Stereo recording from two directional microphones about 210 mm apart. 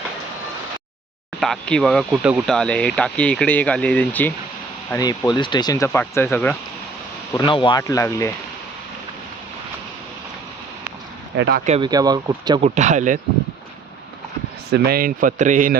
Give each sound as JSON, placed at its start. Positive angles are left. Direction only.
{"t": 1.4, "sound": "speech", "side_deg": 5}
{"t": 7.3, "sound": "speech", "side_deg": 25}
{"t": 11.3, "sound": "speech", "side_deg": -55}
{"t": 11.6, "sound": "a man's voice", "side_deg": -30}
{"t": 11.9, "sound": "speech", "side_deg": -20}
{"t": 12.6, "sound": "a man's voice", "side_deg": -35}
{"t": 14.7, "sound": "a man's voice", "side_deg": -45}